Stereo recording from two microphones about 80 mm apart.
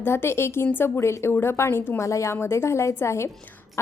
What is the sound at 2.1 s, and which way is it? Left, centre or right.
A woman's voice, left.